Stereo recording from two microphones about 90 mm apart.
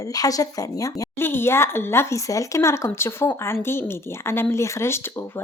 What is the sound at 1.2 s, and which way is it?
Speech, 25° left (ahead or behind).